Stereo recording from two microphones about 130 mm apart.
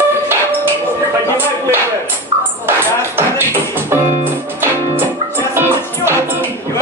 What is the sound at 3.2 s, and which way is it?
Music, 15° right (ahead or behind).